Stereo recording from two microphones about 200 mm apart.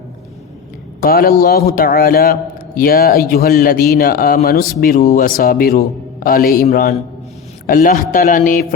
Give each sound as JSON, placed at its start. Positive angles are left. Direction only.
{"t": 1.0, "sound": "a man's voice", "side_deg": 50}